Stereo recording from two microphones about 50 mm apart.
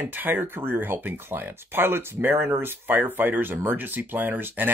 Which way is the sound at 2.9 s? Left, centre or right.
Right.